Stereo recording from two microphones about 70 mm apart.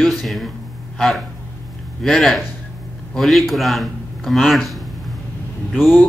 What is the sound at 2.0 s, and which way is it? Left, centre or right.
A man's voice, centre.